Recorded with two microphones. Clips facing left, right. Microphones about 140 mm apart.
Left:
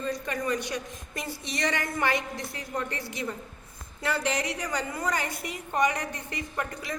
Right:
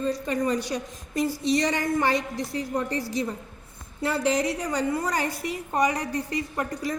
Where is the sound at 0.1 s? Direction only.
30° right (ahead or behind).